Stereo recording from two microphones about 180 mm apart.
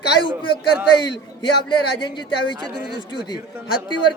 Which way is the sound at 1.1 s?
25° left (ahead or behind).